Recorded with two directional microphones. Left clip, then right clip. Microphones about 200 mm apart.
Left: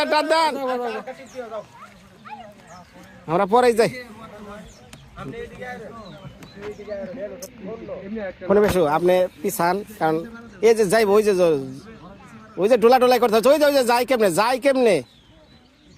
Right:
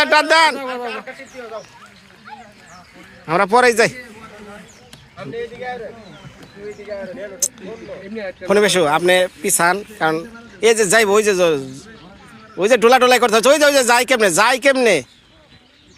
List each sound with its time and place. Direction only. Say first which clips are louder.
0.0 s speech: right 6 dB; 5° right (ahead or behind)
0.6 s speech: even; 25° left (ahead or behind)
3.2 s speech: right 4 dB; centre (ahead or behind)
5.1 s speech: right 7 dB; 20° left (ahead or behind)
8.7 s speech: right 4 dB; 5° right (ahead or behind)